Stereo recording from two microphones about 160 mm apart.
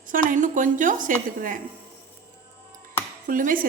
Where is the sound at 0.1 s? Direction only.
55° right (ahead or behind).